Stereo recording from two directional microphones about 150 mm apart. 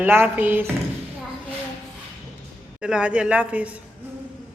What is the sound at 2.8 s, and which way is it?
Speech, 5° right (ahead or behind).